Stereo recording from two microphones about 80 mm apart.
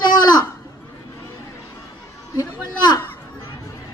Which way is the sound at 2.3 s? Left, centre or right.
Left.